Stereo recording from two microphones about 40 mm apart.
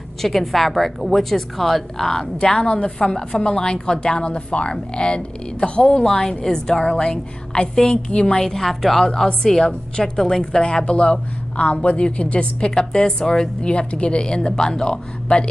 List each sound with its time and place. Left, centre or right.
0.2 s a woman's voice: centre
2.4 s a woman's voice: centre
6.0 s a woman's voice: centre
8.4 s a woman's voice: centre